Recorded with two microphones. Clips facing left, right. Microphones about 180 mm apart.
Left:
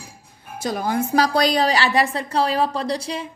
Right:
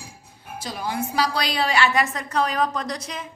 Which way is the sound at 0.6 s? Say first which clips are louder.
Left 6 dB; 50° left (ahead or behind).